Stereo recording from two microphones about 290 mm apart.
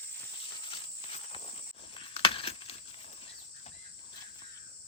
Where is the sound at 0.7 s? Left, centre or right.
Centre.